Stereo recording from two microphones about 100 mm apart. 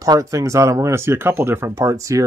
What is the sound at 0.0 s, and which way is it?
Speech, 35° right (ahead or behind).